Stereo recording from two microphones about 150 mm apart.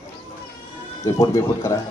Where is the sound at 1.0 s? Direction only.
20° left (ahead or behind).